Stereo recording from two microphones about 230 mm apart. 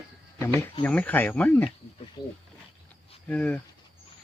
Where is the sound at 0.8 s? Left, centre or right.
Centre.